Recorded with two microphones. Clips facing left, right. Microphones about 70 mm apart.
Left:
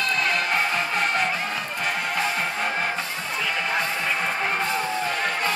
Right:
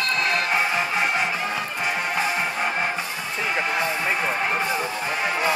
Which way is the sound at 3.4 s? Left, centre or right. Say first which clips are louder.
Right 3 dB; right.